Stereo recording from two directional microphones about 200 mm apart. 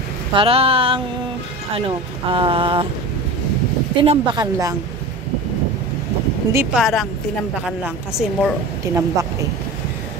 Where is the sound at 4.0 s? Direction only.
25° right (ahead or behind).